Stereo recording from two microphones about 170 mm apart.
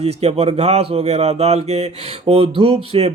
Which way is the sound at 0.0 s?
40° right (ahead or behind).